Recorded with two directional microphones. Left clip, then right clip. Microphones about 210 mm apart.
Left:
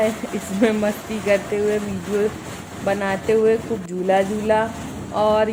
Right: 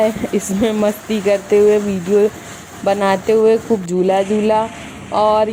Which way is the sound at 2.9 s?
45° right (ahead or behind).